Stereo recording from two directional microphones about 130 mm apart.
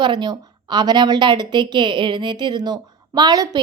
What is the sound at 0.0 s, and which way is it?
A woman's voice, 35° right (ahead or behind).